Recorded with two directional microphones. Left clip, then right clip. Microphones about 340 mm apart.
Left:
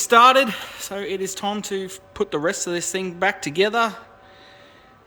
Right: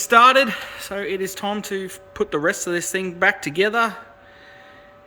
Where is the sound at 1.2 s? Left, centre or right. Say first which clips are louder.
Right 1 dB; centre.